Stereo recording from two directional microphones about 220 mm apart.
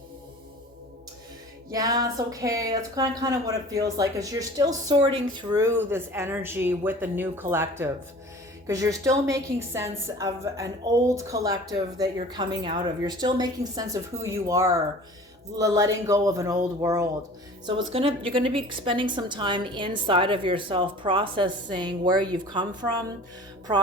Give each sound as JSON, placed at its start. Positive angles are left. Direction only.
{"t": 1.7, "sound": "a woman's voice", "side_deg": -15}
{"t": 18.0, "sound": "a woman's voice", "side_deg": -25}